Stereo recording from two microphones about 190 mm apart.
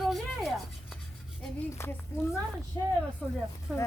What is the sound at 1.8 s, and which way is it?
Speech, 15° left (ahead or behind).